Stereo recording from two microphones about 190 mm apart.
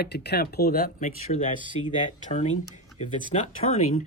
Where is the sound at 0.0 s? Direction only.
60° left (ahead or behind).